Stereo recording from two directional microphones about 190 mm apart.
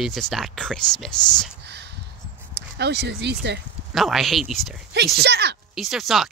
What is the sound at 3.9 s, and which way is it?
Speech, centre (ahead or behind).